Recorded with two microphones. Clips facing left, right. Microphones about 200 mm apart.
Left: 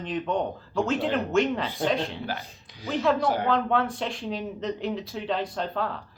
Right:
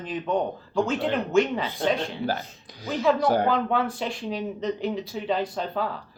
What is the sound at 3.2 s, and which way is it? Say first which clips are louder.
Speech: right 4 dB; 40° right (ahead or behind).